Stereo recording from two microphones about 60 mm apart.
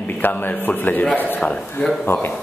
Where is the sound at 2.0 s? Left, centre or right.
Left.